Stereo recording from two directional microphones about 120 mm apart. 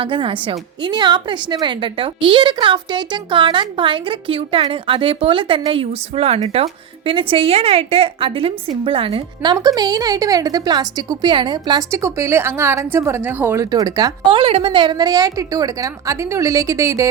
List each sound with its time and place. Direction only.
0.0 s a woman's voice: 45° right (ahead or behind)
9.4 s a woman's voice: 35° right (ahead or behind)
11.9 s a woman's voice: 25° right (ahead or behind)
13.7 s a woman's voice: 30° right (ahead or behind)
14.3 s a woman's voice: 50° right (ahead or behind); by 17.1 s 25° right (ahead or behind)